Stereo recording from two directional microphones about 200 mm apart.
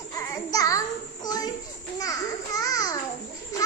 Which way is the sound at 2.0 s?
15° left (ahead or behind).